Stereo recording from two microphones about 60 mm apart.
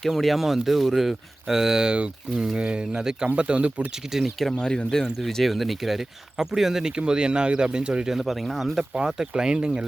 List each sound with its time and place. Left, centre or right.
0.0 s speech: centre; by 3.8 s right
4.1 s speech: centre
4.5 s speech: centre
8.1 s speech: centre
9.0 s speech: centre